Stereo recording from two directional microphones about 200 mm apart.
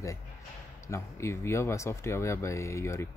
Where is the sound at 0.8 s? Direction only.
15° left (ahead or behind).